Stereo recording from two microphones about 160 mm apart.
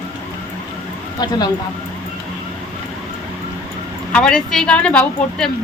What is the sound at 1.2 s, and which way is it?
Speech, 25° left (ahead or behind).